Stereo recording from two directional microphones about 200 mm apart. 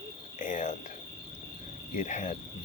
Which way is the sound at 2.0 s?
40° left (ahead or behind).